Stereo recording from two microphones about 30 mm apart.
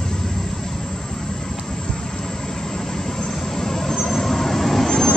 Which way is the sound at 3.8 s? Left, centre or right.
Centre.